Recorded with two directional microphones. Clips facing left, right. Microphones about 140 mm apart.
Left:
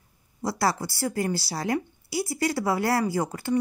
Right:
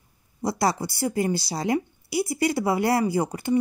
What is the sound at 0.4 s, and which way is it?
Speech, 15° right (ahead or behind).